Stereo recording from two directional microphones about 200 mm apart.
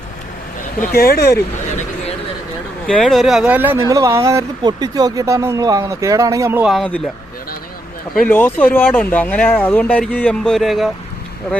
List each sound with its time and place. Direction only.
0.8 s speech: 50° left (ahead or behind)
2.8 s speech: centre (ahead or behind)
8.3 s speech: 10° left (ahead or behind)